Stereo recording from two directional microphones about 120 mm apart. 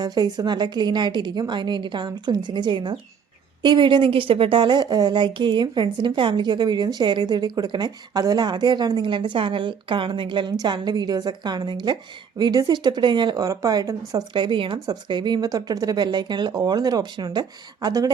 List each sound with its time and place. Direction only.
0.0 s a woman's voice: 35° right (ahead or behind)